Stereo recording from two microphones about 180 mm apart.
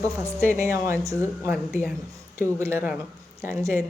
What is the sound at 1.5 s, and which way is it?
Speech, centre (ahead or behind).